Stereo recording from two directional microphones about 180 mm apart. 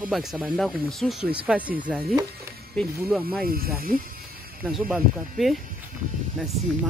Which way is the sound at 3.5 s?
55° right (ahead or behind).